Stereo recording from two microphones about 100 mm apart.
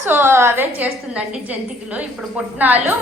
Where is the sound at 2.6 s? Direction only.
15° right (ahead or behind).